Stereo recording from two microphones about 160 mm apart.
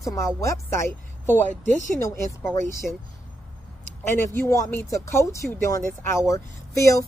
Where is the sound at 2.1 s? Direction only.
15° left (ahead or behind).